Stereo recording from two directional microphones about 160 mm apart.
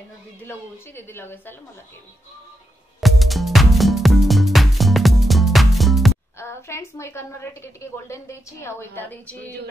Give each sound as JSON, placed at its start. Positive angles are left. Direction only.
{"t": 0.5, "sound": "a woman's voice", "side_deg": 15}
{"t": 3.0, "sound": "music", "side_deg": 0}
{"t": 6.3, "sound": "a woman's voice", "side_deg": 15}